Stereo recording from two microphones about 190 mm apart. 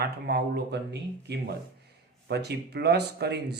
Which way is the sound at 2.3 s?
60° right (ahead or behind).